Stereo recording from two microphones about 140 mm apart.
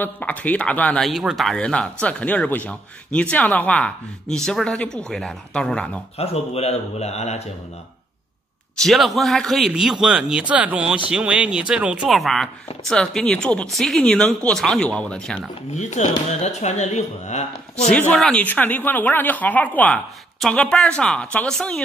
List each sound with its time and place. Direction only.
0.0 s speech: 10° left (ahead or behind)
6.1 s speech: 45° left (ahead or behind)
8.8 s speech: centre (ahead or behind)
15.7 s speech: 55° left (ahead or behind)
17.7 s speech: 5° left (ahead or behind)